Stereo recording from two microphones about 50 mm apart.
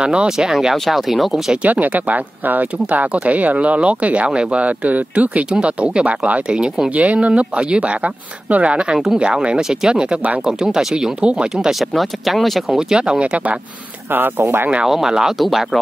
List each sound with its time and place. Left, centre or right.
0.0 s speech: centre
1.6 s speech: right
8.9 s speech: centre
9.2 s speech: right
10.4 s speech: centre
11.4 s speech: centre
12.7 s speech: centre
14.1 s speech: right
14.9 s speech: centre